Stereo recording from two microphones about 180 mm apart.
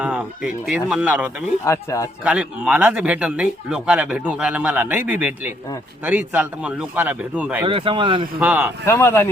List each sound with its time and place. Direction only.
0.0 s speech: 5° right (ahead or behind)
1.6 s speech: 15° left (ahead or behind)
2.2 s speech: 5° right (ahead or behind)
7.6 s speech: 30° right (ahead or behind)
8.4 s speech: 10° right (ahead or behind)
8.8 s speech: 15° left (ahead or behind)